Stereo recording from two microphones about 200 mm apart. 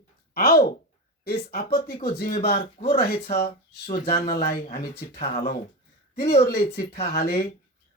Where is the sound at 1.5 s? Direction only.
50° left (ahead or behind).